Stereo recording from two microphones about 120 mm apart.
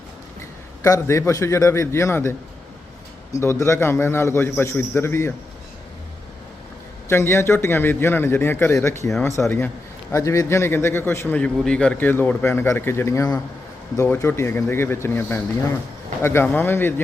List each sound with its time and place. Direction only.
0.8 s a man's voice: 25° left (ahead or behind)
3.4 s a man's voice: 25° left (ahead or behind)
7.1 s a man's voice: 20° left (ahead or behind)
11.3 s a man's voice: 5° left (ahead or behind)